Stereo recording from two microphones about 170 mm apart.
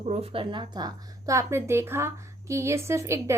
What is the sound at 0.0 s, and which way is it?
A woman's voice, 40° right (ahead or behind).